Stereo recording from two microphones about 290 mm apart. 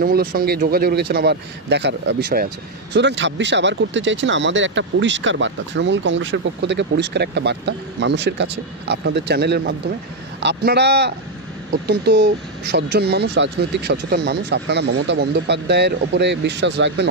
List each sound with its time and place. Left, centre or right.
0.0 s speech: right